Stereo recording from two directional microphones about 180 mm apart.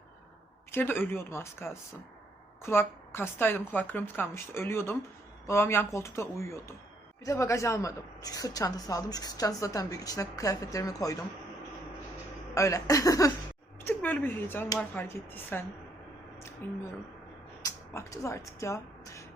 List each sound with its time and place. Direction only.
0.7 s a woman's voice: 10° left (ahead or behind)
12.5 s a woman's voice: 15° left (ahead or behind)
16.6 s a woman's voice: 10° left (ahead or behind)